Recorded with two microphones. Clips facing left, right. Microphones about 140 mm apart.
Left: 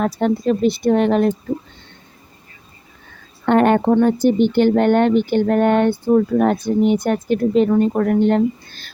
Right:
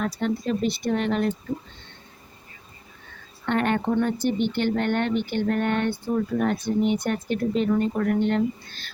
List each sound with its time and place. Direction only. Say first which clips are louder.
0.0 s speech: left 8 dB; 45° left (ahead or behind)
3.4 s speech: left 10 dB; 45° left (ahead or behind)